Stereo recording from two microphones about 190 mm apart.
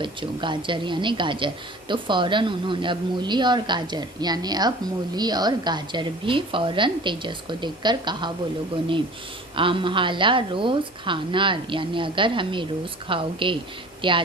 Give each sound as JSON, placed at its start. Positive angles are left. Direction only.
{"t": 0.0, "sound": "a woman's voice", "side_deg": -25}
{"t": 9.6, "sound": "a woman's voice", "side_deg": -25}